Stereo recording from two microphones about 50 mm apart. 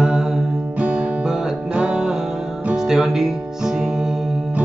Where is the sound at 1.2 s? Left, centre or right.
Centre.